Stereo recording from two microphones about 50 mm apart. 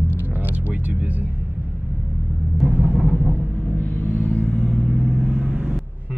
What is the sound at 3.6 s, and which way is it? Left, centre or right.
Vehicle, left.